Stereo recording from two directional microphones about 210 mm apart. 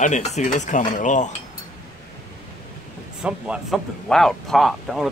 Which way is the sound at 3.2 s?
5° right (ahead or behind).